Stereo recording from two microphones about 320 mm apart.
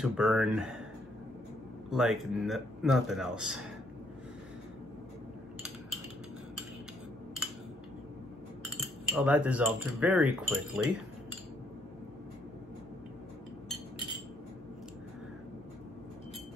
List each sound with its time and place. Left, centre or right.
0.0 s speech: centre
1.9 s speech: centre
8.6 s cutlery: centre